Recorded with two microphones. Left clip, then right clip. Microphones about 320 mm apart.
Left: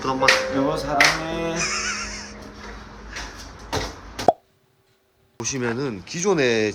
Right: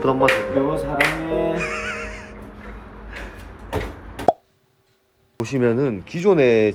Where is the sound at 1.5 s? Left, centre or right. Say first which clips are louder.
Even; centre.